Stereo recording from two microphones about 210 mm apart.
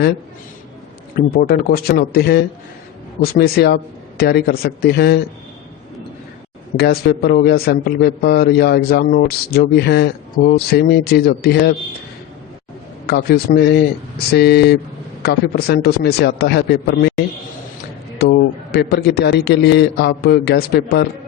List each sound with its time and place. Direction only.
1.1 s a man's voice: 45° left (ahead or behind)
6.7 s a man's voice: 50° left (ahead or behind)
13.1 s a man's voice: 50° left (ahead or behind)